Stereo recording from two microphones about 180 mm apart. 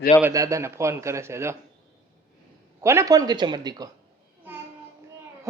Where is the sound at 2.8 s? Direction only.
15° right (ahead or behind).